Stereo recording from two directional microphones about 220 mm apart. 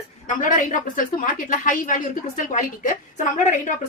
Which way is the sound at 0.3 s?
35° left (ahead or behind).